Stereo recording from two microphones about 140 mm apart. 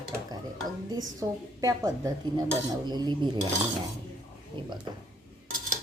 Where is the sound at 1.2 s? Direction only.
20° right (ahead or behind).